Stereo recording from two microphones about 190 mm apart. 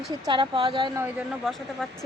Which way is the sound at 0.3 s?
25° right (ahead or behind).